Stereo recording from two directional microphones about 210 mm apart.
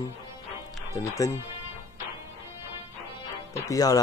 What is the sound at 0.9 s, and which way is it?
Speech, 15° left (ahead or behind).